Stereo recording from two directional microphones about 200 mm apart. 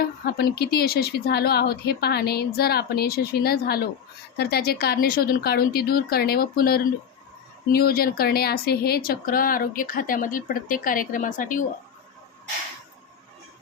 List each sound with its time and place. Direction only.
0.0 s speech: 50° left (ahead or behind)